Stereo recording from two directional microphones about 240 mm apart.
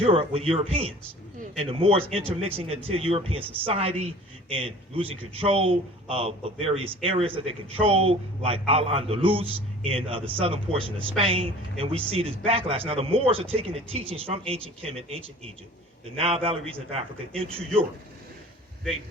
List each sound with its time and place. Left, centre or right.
0.0 s a man's voice: right
16.1 s a man's voice: right
17.3 s speech: centre